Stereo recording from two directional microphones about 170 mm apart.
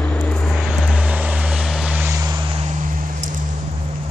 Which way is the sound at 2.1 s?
20° right (ahead or behind).